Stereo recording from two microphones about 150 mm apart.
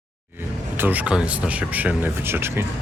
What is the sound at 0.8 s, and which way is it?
Speech, 10° right (ahead or behind).